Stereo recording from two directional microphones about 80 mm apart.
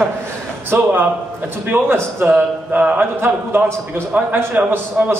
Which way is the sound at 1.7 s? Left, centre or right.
Right.